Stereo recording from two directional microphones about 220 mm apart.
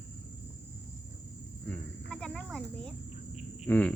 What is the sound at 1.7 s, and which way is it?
Cricket, 5° left (ahead or behind).